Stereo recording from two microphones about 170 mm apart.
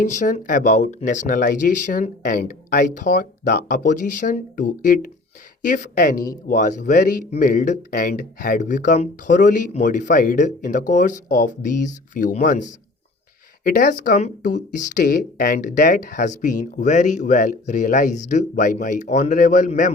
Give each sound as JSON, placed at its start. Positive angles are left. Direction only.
{"t": 0.0, "sound": "speech", "side_deg": 50}